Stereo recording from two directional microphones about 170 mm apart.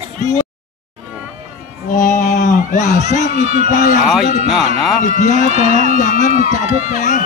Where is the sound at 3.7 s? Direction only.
50° left (ahead or behind).